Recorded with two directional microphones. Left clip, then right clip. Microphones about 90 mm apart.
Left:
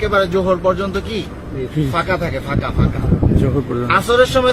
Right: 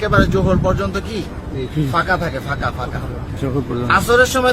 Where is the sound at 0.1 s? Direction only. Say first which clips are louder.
Left 2 dB; 50° right (ahead or behind).